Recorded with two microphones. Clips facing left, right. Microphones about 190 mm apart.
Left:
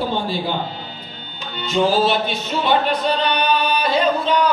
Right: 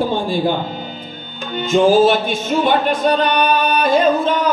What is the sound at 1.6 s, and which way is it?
A man's voice, 50° right (ahead or behind).